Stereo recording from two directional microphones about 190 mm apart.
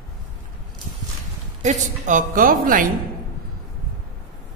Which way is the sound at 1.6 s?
40° right (ahead or behind).